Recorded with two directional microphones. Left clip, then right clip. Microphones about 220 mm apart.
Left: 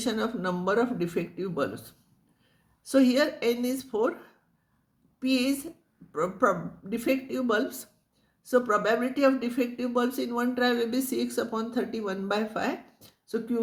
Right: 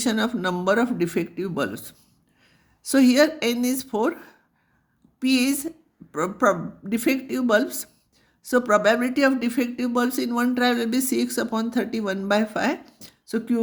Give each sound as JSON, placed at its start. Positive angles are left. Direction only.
{"t": 0.0, "sound": "speech", "side_deg": -50}